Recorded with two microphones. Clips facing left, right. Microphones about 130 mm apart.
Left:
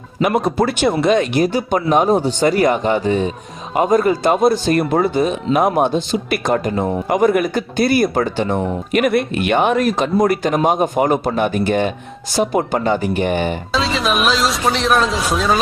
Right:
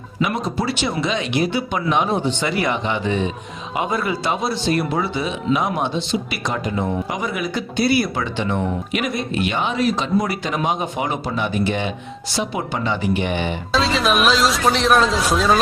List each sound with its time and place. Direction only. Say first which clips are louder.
0.2 s speech: left 6 dB; 55° left (ahead or behind)
13.7 s speech: right 1 dB; centre (ahead or behind)